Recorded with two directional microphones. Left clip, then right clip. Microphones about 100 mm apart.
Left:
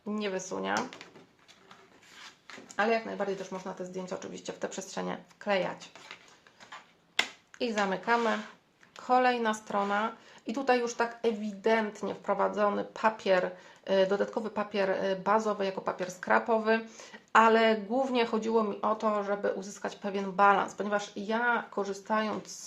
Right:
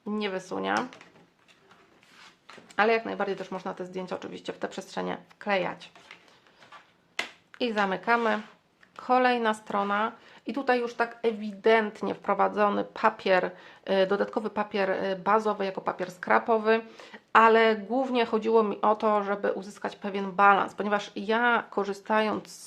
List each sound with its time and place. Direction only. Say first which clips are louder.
0.0 s speech: right 2 dB; 45° right (ahead or behind)
2.7 s speech: right 4 dB; 70° right (ahead or behind); by 5.9 s 40° right (ahead or behind)
7.5 s speech: right 3 dB; 40° right (ahead or behind)
11.4 s speech: right 7 dB; 45° right (ahead or behind)
11.9 s speech: right 4 dB; 65° right (ahead or behind); by 18.3 s 35° right (ahead or behind)
18.3 s speech: right 5 dB; 50° right (ahead or behind)
20.7 s speech: right 3 dB; 70° right (ahead or behind)
22.2 s speech: right 5 dB; 55° right (ahead or behind)